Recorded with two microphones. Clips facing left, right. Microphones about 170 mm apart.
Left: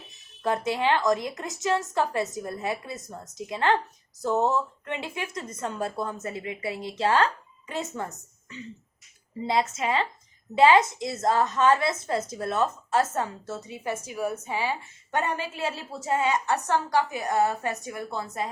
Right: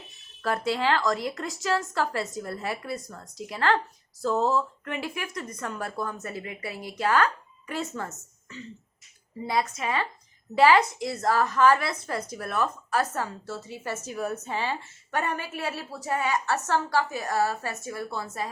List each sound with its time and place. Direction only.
0.1 s a woman's voice: 20° left (ahead or behind)
15.1 s a woman's voice: 20° left (ahead or behind)